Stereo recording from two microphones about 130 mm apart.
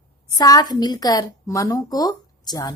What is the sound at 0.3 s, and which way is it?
A woman's voice, 30° left (ahead or behind).